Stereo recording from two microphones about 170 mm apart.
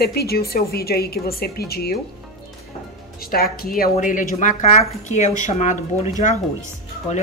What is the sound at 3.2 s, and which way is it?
A woman's voice, 60° left (ahead or behind).